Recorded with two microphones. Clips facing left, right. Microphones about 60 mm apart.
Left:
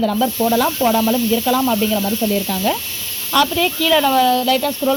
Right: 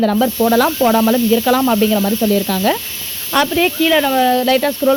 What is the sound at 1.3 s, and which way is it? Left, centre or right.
Speech, right.